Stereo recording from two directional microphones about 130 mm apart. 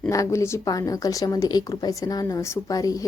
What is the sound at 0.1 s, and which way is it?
A woman's voice, 25° left (ahead or behind).